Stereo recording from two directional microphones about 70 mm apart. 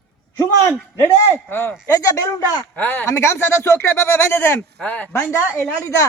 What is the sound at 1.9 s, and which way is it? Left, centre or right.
Speech, left.